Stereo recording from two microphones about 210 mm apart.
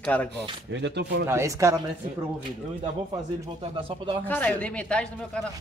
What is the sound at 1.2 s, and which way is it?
Speech, 15° right (ahead or behind).